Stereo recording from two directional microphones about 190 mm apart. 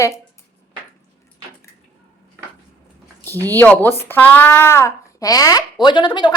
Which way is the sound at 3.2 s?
10° left (ahead or behind).